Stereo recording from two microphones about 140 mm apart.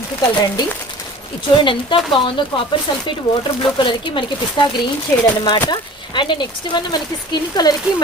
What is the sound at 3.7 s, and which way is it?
Speech, 35° left (ahead or behind).